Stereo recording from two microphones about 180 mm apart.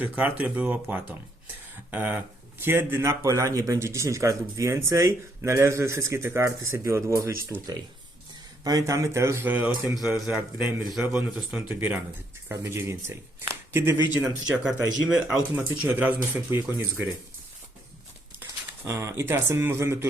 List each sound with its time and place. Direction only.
0.0 s speech: 10° right (ahead or behind)
8.6 s speech: 20° right (ahead or behind)
18.9 s speech: 15° right (ahead or behind)